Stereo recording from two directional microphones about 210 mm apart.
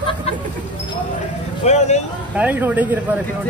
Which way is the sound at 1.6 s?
35° left (ahead or behind).